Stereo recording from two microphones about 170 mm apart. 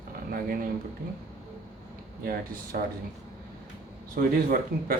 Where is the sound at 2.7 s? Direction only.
60° right (ahead or behind).